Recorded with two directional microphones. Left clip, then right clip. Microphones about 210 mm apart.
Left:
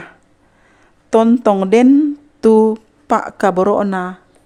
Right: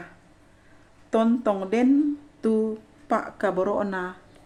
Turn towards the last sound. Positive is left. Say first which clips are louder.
# left 11 dB
turn(degrees=50)  # may be behind; listen again after turning